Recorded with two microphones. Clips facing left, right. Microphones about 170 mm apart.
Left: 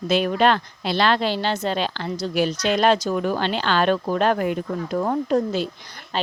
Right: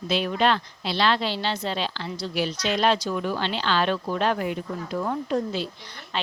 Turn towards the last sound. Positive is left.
turn(degrees=40)  # may be behind; listen again after turning